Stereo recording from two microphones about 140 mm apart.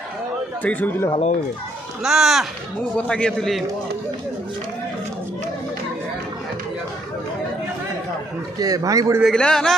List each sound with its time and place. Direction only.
0.6 s speech: 10° left (ahead or behind)
2.0 s a man's voice: 5° right (ahead or behind)
8.5 s a man's voice: 25° right (ahead or behind)
9.2 s a man's voice: 5° left (ahead or behind)